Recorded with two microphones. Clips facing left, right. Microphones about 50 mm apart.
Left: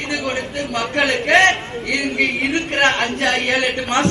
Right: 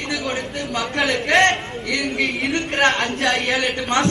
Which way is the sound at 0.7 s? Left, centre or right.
Left.